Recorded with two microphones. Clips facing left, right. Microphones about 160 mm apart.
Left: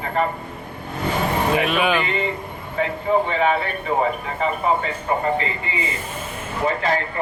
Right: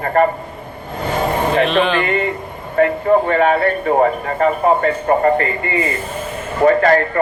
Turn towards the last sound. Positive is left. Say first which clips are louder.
# right 9 dB
turn(degrees=-55)  # may be behind; listen again after turning